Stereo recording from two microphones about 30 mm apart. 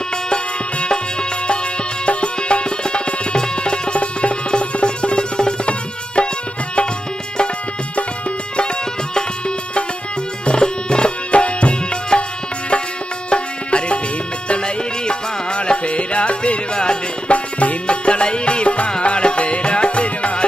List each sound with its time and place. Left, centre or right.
2.0 s music: left
10.4 s music: left
17.3 s music: left
17.8 s music: left